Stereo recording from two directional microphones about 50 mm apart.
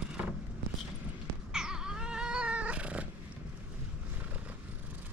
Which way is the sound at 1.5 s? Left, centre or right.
Centre.